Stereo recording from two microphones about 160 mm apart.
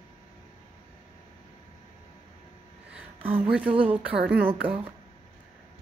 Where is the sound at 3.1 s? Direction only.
35° right (ahead or behind).